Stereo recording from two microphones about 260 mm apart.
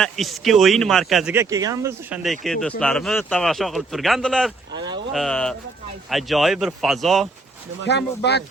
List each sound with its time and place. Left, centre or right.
0.0 s speech: centre
4.7 s a sound: centre
5.1 s speech: centre
7.9 s speech: left